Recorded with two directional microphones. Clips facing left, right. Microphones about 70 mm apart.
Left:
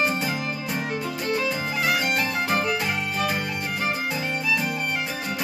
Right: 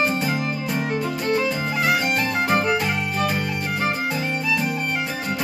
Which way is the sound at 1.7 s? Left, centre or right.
Right.